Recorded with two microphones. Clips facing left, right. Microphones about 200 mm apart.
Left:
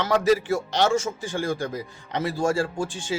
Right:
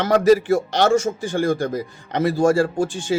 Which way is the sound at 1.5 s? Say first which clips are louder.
Right 6 dB; 40° right (ahead or behind).